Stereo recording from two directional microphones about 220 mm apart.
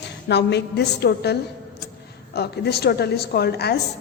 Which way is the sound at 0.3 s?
50° left (ahead or behind).